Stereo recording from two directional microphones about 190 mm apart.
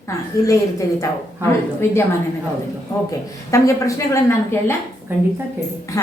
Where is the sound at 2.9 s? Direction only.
20° left (ahead or behind).